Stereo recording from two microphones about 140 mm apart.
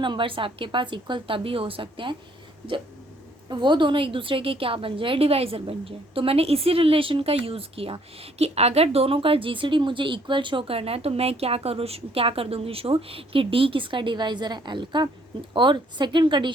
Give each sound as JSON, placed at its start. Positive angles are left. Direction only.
{"t": 0.0, "sound": "a woman's voice", "side_deg": -35}
{"t": 3.5, "sound": "a woman's voice", "side_deg": -35}